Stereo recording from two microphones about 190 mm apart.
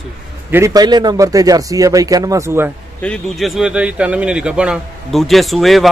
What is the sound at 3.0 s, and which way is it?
A man's voice, centre (ahead or behind).